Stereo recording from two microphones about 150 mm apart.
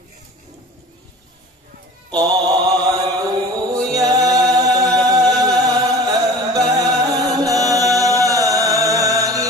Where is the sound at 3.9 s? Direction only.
25° right (ahead or behind).